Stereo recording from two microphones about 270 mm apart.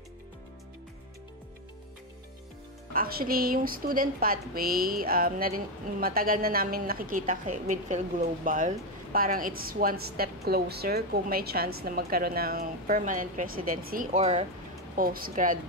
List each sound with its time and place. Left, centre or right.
2.9 s speech: right